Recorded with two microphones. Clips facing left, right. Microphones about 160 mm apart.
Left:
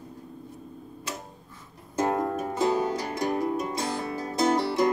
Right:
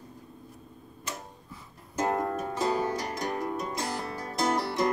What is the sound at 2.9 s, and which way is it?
Music, 25° left (ahead or behind).